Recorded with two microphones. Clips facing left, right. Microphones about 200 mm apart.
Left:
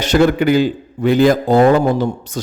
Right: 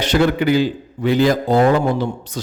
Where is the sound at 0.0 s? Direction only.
45° left (ahead or behind).